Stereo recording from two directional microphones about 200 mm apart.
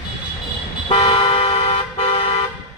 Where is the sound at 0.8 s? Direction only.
25° left (ahead or behind).